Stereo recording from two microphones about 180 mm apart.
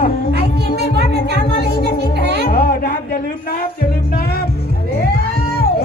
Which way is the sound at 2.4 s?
55° left (ahead or behind).